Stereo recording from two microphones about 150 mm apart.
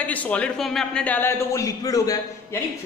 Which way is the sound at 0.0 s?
10° left (ahead or behind).